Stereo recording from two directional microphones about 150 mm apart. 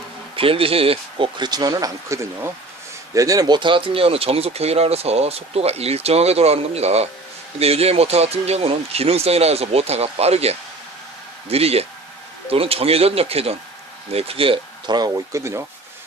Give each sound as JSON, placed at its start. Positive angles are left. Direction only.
{"t": 0.3, "sound": "speech", "side_deg": -40}